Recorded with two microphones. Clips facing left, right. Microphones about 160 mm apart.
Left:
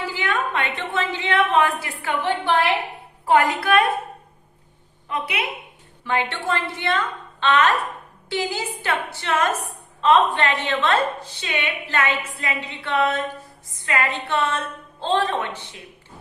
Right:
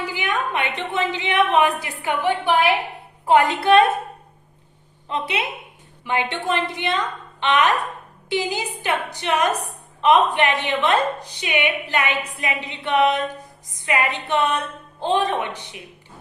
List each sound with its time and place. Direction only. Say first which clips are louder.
0.1 s a woman's voice: even; 15° right (ahead or behind)
5.0 s a woman's voice: right 1 dB; 25° right (ahead or behind)